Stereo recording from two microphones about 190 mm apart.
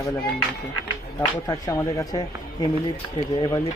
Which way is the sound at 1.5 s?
15° left (ahead or behind).